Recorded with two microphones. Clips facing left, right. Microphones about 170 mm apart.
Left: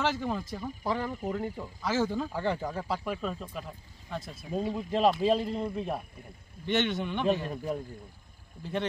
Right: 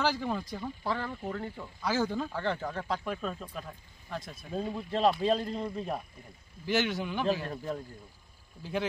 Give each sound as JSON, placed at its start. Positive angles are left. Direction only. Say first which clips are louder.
{"t": 0.0, "sound": "speech", "louder": "even", "side_deg": 0}
{"t": 0.8, "sound": "speech", "louder": "left 4 dB", "side_deg": 15}
{"t": 2.3, "sound": "speech", "louder": "left 2 dB", "side_deg": 15}
{"t": 7.4, "sound": "speech", "louder": "left 2 dB", "side_deg": 10}